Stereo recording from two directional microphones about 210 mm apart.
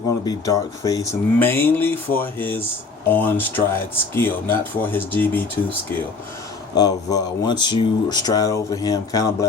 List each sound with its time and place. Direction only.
0.3 s speech: 15° left (ahead or behind)
6.7 s speech: 20° left (ahead or behind)